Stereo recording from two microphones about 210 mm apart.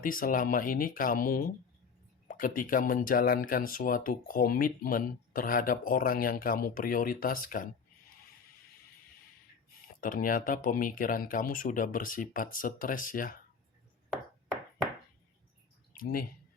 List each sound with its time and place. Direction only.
0.0 s speech: 40° left (ahead or behind)
10.0 s speech: 40° left (ahead or behind)
16.0 s speech: 45° left (ahead or behind)